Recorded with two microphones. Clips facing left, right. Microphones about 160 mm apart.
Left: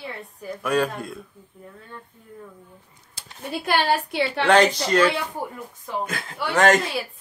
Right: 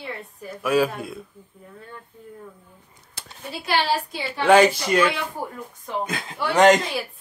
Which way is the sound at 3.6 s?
55° left (ahead or behind).